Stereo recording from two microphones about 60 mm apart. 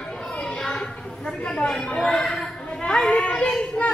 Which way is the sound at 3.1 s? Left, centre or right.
Centre.